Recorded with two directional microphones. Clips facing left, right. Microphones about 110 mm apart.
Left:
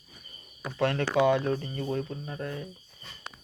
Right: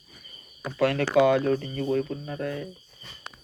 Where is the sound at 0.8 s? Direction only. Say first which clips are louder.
Right 4 dB; 25° left (ahead or behind).